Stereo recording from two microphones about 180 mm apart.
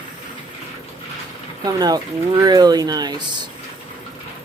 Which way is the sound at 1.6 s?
20° right (ahead or behind).